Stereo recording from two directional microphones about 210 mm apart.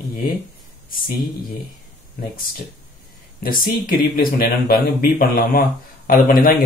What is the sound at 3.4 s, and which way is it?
Speech, 40° left (ahead or behind).